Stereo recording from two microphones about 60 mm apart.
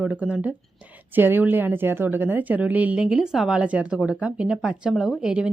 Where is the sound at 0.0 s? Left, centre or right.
Right; by 3.6 s centre.